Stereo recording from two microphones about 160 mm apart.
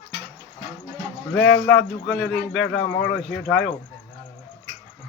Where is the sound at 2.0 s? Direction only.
Centre (ahead or behind).